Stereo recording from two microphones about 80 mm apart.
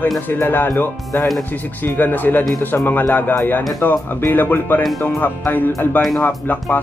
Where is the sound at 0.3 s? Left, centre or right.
Left.